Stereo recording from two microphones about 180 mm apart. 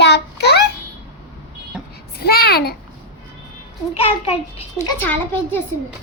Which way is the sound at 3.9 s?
35° left (ahead or behind).